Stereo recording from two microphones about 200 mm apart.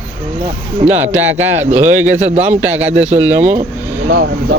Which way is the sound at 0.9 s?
10° right (ahead or behind).